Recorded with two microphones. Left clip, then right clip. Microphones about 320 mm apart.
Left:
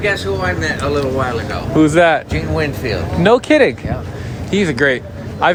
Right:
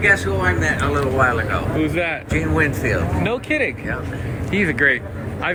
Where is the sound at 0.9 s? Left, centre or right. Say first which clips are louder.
Even; centre.